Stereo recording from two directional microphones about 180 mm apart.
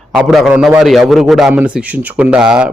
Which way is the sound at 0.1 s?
Centre (ahead or behind).